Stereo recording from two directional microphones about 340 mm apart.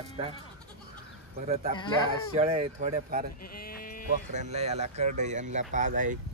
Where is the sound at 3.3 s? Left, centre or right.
Left.